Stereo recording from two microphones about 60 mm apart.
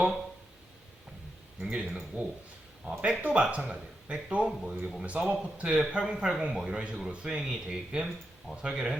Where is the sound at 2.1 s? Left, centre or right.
Right.